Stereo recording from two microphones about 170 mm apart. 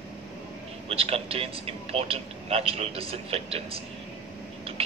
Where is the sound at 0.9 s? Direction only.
35° right (ahead or behind).